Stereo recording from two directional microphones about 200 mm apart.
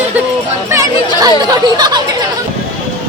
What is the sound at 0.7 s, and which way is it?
Speech, 15° right (ahead or behind).